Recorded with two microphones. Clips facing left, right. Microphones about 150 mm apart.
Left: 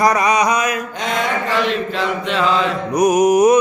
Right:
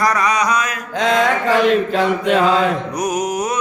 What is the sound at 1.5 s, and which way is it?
Mantra, 45° right (ahead or behind).